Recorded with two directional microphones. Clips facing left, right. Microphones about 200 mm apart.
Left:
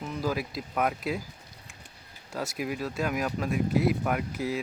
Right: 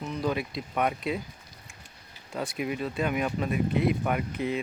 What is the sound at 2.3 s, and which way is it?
Speech, centre (ahead or behind).